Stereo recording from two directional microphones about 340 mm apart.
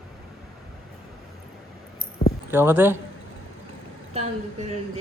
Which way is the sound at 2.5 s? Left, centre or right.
Centre.